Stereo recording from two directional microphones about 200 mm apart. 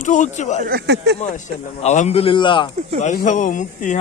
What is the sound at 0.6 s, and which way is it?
Speech, 50° right (ahead or behind).